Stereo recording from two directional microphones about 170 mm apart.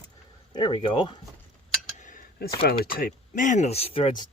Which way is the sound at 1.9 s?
50° left (ahead or behind).